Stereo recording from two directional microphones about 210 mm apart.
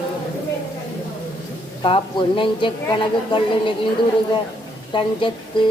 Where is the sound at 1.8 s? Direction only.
25° left (ahead or behind).